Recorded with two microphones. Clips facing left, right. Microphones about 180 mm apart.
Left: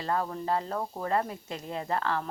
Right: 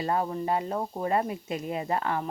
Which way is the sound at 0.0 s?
20° right (ahead or behind).